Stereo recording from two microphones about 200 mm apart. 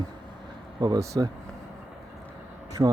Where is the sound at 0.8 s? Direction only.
15° right (ahead or behind).